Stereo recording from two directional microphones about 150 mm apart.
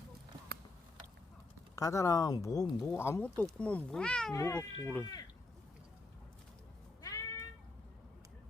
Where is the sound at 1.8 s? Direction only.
20° left (ahead or behind); by 4.3 s 5° left (ahead or behind).